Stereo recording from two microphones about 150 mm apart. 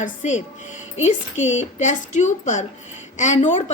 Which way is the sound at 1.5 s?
55° left (ahead or behind).